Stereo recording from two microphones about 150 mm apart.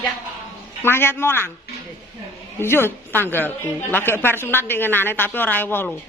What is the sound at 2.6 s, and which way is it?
A woman's voice, 15° left (ahead or behind).